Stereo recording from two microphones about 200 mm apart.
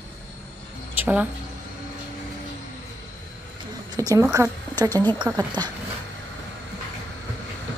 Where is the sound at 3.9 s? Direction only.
15° right (ahead or behind).